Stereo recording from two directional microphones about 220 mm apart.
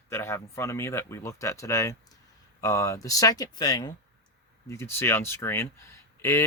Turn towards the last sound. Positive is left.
turn(degrees=10)  # may be behind; listen again after turning